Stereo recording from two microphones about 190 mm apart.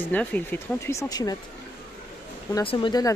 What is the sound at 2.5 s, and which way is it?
Speech, 25° left (ahead or behind).